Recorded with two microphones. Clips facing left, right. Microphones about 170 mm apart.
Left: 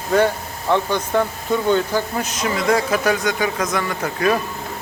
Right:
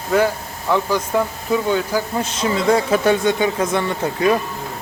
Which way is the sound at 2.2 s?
30° right (ahead or behind).